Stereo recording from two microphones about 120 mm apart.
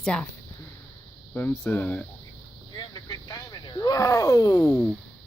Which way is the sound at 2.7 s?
35° left (ahead or behind).